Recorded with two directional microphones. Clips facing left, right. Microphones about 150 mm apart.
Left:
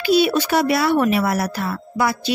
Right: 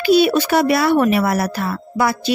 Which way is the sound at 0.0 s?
55° right (ahead or behind).